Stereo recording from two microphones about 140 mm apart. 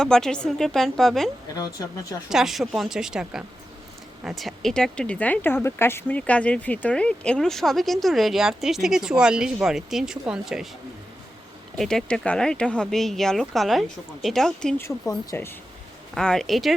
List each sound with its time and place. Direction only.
0.0 s speech: 5° left (ahead or behind)
1.8 s speech: 20° left (ahead or behind)
2.3 s speech: 5° right (ahead or behind)
11.8 s speech: 5° left (ahead or behind)
14.8 s speech: 20° left (ahead or behind)
16.1 s speech: 5° left (ahead or behind)